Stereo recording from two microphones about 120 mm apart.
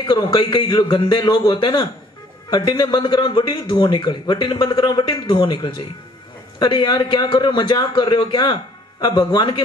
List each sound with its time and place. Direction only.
0.0 s a man's voice: 40° left (ahead or behind)